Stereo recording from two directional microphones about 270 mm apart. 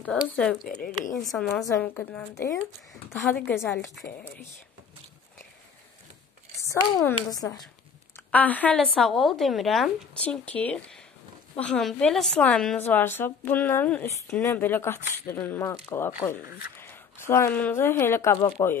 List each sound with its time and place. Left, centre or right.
0.0 s speech: centre
0.7 s speech: left
1.1 s a woman's voice: centre
6.6 s a child's voice: centre